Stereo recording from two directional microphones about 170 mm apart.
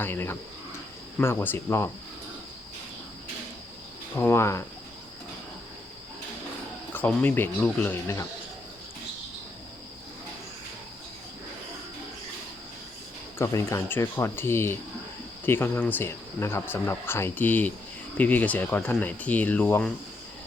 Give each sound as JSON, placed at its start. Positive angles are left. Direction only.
{"t": 0.0, "sound": "speech", "side_deg": 15}
{"t": 4.1, "sound": "speech", "side_deg": 15}
{"t": 6.9, "sound": "speech", "side_deg": 10}
{"t": 13.4, "sound": "speech", "side_deg": 20}